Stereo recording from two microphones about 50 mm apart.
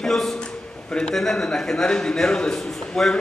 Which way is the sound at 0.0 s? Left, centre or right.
Centre.